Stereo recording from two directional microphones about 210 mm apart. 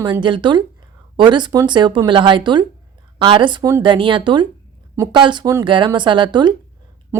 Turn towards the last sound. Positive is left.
turn(degrees=-20)  # may be behind; listen again after turning